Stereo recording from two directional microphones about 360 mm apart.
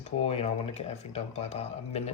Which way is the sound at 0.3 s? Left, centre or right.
Centre.